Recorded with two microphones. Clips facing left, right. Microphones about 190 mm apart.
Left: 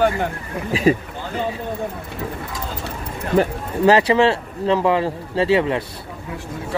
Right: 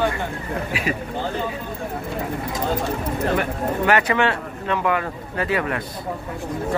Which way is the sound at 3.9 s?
30° left (ahead or behind).